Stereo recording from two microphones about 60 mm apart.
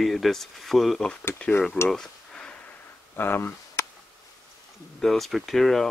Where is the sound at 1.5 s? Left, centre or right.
Centre.